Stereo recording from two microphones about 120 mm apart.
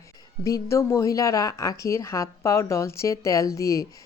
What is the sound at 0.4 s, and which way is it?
A woman's voice, 25° left (ahead or behind).